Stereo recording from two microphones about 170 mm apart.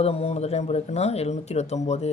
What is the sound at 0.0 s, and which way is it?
Speech, 35° left (ahead or behind).